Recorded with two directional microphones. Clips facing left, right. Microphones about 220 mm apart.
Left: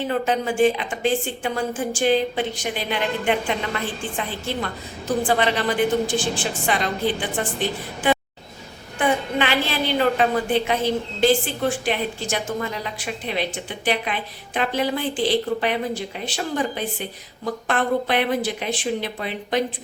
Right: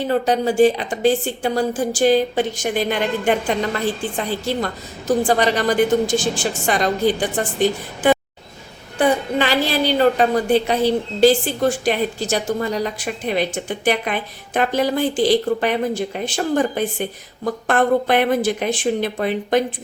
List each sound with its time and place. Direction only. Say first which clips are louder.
0.1 s a woman's voice: right 7 dB; 40° right (ahead or behind)